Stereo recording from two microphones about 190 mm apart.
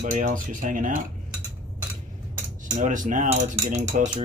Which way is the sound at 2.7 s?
45° right (ahead or behind).